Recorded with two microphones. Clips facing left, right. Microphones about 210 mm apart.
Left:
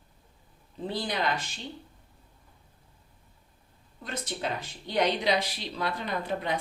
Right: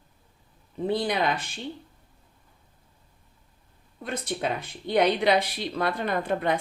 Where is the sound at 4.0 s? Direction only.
60° right (ahead or behind).